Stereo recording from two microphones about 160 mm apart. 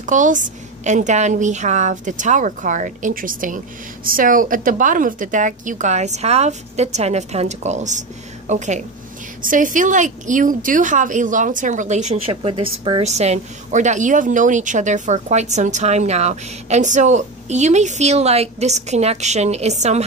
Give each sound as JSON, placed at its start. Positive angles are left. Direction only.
{"t": 0.0, "sound": "a woman's voice", "side_deg": -50}